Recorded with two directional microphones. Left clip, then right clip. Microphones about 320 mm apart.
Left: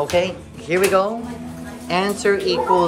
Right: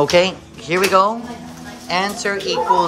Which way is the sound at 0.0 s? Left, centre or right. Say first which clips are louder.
Right 5 dB; centre.